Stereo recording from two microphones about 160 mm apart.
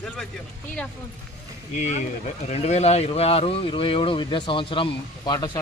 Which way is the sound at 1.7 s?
45° left (ahead or behind).